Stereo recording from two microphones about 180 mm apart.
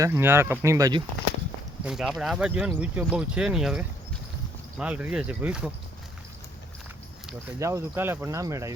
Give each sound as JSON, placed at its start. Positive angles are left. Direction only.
{"t": 0.0, "sound": "speech", "side_deg": -15}
{"t": 1.8, "sound": "speech", "side_deg": -5}
{"t": 7.6, "sound": "speech", "side_deg": -15}